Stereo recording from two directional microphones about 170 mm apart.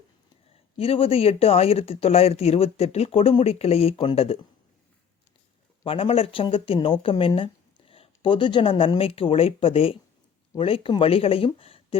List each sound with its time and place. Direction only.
0.8 s speech: 35° left (ahead or behind)
5.8 s speech: 35° left (ahead or behind)